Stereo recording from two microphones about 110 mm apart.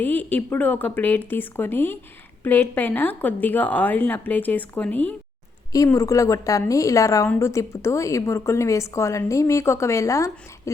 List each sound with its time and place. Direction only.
0.0 s a woman's voice: 15° left (ahead or behind)
5.7 s a woman's voice: 30° left (ahead or behind)